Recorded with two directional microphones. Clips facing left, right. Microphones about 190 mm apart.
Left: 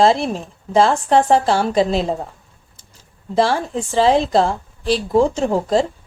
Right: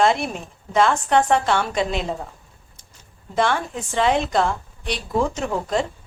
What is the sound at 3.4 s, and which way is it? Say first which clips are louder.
Speech: left 4 dB; 35° left (ahead or behind).